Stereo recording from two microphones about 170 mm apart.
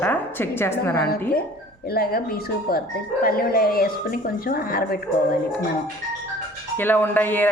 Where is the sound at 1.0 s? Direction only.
65° left (ahead or behind).